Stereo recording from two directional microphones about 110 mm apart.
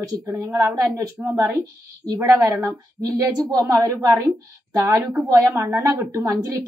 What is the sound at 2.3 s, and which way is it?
A woman's voice, 30° right (ahead or behind).